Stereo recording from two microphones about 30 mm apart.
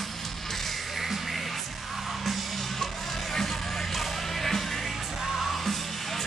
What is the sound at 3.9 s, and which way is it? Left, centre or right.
Music, centre.